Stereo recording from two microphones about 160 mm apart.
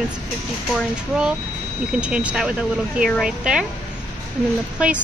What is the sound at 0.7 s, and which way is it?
A woman's voice, 5° right (ahead or behind).